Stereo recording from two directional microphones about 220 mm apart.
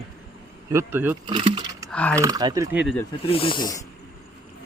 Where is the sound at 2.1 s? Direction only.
15° right (ahead or behind).